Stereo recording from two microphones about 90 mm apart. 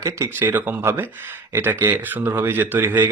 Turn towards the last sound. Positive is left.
turn(degrees=-20)  # may be behind; listen again after turning